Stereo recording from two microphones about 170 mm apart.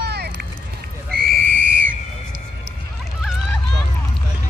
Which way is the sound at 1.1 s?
60° right (ahead or behind).